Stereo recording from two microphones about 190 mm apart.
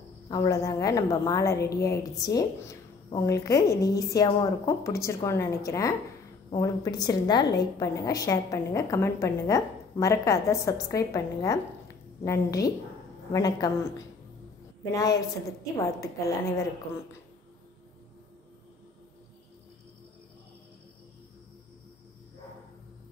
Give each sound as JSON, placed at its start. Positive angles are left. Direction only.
{"t": 0.3, "sound": "a woman's voice", "side_deg": 15}